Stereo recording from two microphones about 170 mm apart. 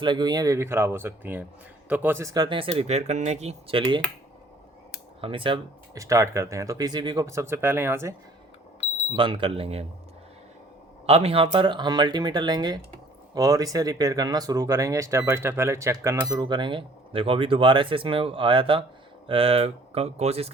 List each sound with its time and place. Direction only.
0.0 s speech: 25° right (ahead or behind)
5.2 s speech: 30° right (ahead or behind); by 8.1 s 15° right (ahead or behind)
9.1 s speech: 30° right (ahead or behind)
11.0 s speech: 35° right (ahead or behind)